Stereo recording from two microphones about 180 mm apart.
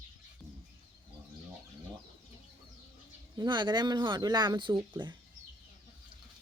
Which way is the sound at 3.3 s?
25° right (ahead or behind).